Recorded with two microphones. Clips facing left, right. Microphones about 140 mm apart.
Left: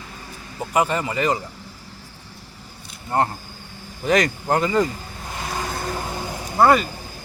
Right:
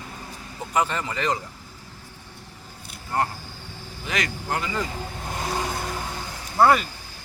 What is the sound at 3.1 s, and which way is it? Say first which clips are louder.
Speech: left 4 dB; 25° left (ahead or behind).